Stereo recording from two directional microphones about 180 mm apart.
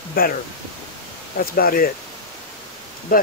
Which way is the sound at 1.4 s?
55° left (ahead or behind).